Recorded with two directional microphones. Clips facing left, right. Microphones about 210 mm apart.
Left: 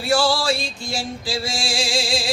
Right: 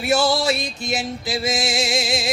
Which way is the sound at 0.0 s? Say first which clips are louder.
Right 1 dB; 20° right (ahead or behind).